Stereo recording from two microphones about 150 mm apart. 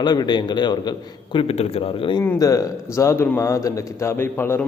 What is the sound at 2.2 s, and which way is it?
A man's voice, 20° left (ahead or behind).